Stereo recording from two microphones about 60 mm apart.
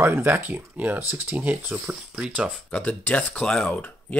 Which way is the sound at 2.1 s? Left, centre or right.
Centre.